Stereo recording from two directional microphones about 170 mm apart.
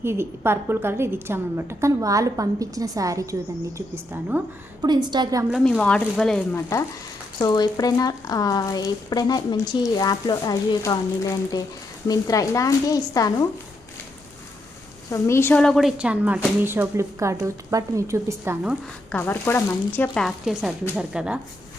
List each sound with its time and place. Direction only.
0.0 s a woman's voice: 15° right (ahead or behind)
4.8 s a woman's voice: 25° right (ahead or behind)
5.8 s a woman's voice: 5° left (ahead or behind)
7.3 s speech: 25° left (ahead or behind)
15.1 s a woman's voice: 15° left (ahead or behind); by 18.5 s 15° right (ahead or behind)
19.1 s a woman's voice: 10° left (ahead or behind); by 21.4 s 5° right (ahead or behind)